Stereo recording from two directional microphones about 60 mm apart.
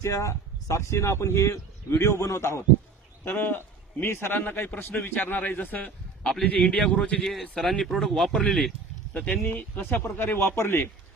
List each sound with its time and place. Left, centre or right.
0.0 s speech: left
3.2 s a man's voice: left; by 8.7 s centre
9.1 s a man's voice: left